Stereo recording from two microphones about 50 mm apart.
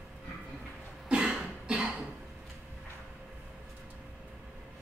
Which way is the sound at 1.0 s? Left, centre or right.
Centre.